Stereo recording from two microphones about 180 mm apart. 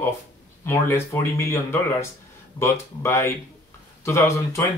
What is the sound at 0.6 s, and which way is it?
Speech, 15° left (ahead or behind).